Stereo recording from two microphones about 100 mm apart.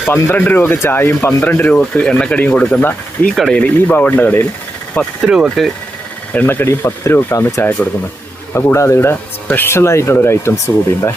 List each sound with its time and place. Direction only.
0.0 s speech: 20° left (ahead or behind); by 3.5 s centre (ahead or behind)
3.5 s speech: 15° left (ahead or behind)
5.2 s speech: 5° right (ahead or behind)
6.3 s speech: 20° left (ahead or behind)
8.5 s speech: 30° left (ahead or behind)